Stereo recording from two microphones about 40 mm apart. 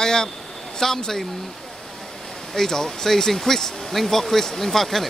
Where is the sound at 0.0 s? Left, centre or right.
Centre.